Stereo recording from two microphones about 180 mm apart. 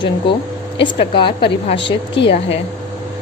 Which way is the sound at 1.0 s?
25° left (ahead or behind).